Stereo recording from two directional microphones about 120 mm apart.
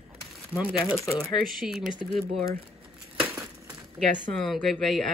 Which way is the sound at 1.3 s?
5° right (ahead or behind).